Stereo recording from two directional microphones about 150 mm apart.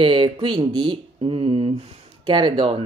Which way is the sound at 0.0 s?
35° right (ahead or behind).